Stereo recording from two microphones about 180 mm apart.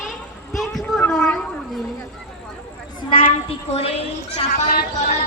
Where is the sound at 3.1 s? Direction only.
30° left (ahead or behind).